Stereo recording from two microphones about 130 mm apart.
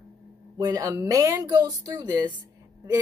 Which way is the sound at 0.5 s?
35° right (ahead or behind).